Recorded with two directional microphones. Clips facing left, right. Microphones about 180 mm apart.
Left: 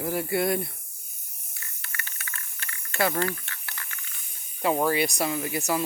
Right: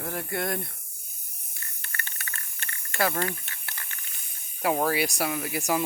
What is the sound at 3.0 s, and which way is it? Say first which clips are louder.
Speech: left 1 dB; 5° right (ahead or behind).